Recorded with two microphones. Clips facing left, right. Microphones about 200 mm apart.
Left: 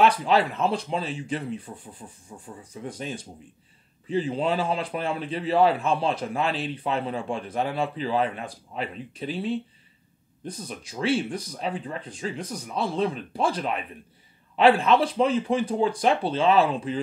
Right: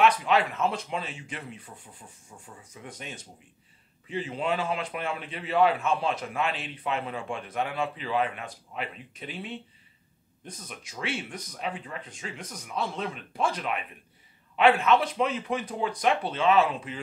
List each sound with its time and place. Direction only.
0.0 s a man's voice: 30° left (ahead or behind)